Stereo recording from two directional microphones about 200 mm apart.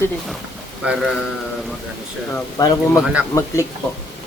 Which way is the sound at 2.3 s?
15° left (ahead or behind).